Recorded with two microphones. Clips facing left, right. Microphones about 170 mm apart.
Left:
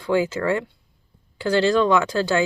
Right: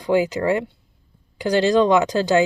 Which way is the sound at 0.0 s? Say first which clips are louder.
Right 2 dB; 15° right (ahead or behind).